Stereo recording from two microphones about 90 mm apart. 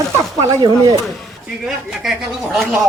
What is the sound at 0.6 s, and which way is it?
Speech, 40° right (ahead or behind).